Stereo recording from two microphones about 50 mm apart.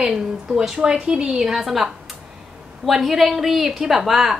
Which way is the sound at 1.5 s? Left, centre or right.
Centre.